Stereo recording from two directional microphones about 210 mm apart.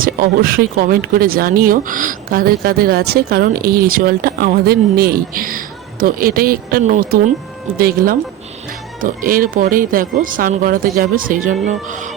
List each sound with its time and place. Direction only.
0.0 s speech: 45° right (ahead or behind)